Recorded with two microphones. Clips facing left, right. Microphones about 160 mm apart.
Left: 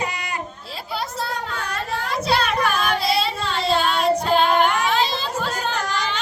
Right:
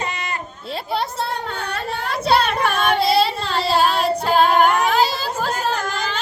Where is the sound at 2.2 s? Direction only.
30° right (ahead or behind).